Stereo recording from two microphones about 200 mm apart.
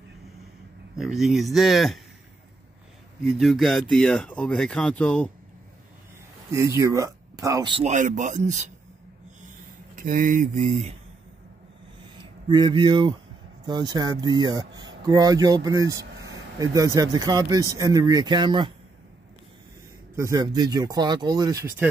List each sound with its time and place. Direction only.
0.9 s speech: centre (ahead or behind)
3.3 s speech: centre (ahead or behind)
6.8 s speech: 15° right (ahead or behind)
7.9 s speech: 40° right (ahead or behind)
9.9 s speech: 40° right (ahead or behind)
12.2 s speech: 25° right (ahead or behind)
20.2 s speech: 15° right (ahead or behind)